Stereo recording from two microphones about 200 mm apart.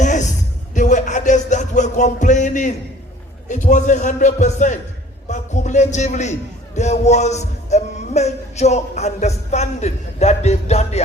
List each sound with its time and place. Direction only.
0.0 s music: 35° left (ahead or behind)